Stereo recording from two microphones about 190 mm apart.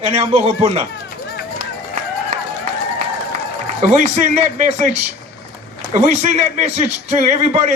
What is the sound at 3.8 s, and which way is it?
A man's voice, 35° right (ahead or behind).